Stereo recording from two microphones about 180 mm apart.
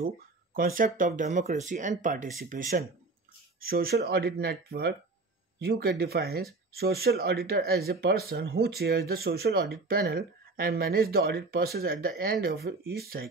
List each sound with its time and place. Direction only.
0.6 s speech: 50° right (ahead or behind)
3.6 s speech: 60° right (ahead or behind)